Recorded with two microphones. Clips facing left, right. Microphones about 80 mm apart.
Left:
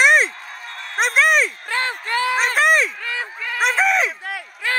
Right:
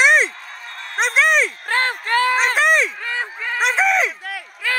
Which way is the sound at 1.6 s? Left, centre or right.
Right.